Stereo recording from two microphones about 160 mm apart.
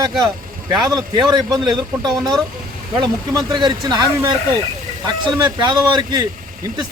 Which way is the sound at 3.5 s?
25° right (ahead or behind).